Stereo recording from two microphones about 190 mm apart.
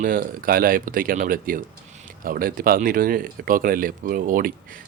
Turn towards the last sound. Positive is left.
turn(degrees=-45)  # may be behind; listen again after turning